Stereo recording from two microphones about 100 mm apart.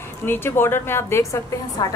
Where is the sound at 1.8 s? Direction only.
40° left (ahead or behind).